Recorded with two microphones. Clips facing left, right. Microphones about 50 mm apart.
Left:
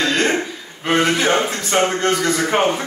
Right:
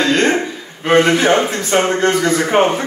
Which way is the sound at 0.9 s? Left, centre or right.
Centre.